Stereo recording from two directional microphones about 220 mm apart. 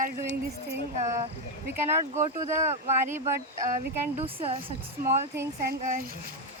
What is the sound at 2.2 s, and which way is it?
Speech, 30° right (ahead or behind).